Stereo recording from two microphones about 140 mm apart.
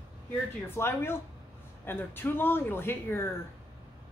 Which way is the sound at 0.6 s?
15° left (ahead or behind).